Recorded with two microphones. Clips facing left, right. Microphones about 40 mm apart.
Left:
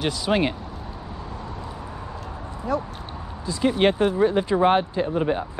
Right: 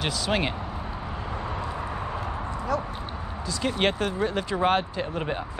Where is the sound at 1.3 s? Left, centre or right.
Right.